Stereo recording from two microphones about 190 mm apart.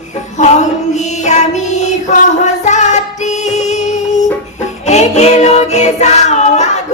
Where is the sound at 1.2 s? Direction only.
40° left (ahead or behind).